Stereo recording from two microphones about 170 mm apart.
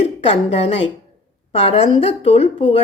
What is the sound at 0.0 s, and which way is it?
A woman's voice, 35° left (ahead or behind).